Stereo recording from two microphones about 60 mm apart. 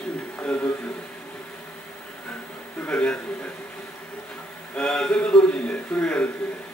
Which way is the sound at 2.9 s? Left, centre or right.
Centre.